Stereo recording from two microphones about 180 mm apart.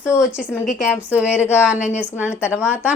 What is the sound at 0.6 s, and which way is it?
Speech, 45° left (ahead or behind).